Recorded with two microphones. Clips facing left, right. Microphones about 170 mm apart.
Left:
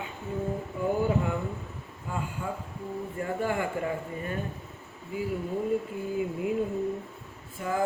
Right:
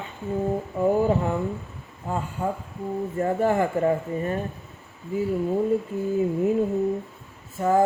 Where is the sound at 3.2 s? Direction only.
40° right (ahead or behind).